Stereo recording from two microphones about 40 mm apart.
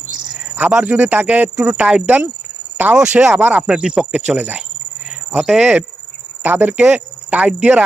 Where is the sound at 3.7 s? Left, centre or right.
Centre.